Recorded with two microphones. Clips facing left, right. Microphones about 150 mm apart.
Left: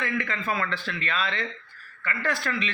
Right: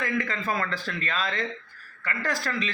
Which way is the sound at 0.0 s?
35° right (ahead or behind).